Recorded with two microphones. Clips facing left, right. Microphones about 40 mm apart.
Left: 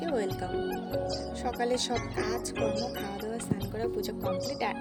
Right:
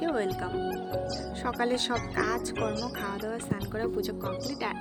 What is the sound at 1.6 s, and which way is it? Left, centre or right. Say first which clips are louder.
Speech: right 1 dB; right.